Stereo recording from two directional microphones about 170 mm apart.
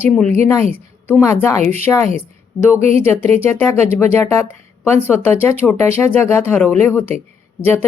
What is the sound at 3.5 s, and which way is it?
Speech, 15° left (ahead or behind).